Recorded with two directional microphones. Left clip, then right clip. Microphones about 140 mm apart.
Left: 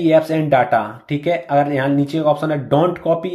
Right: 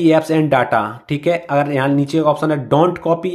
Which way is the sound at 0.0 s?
30° right (ahead or behind).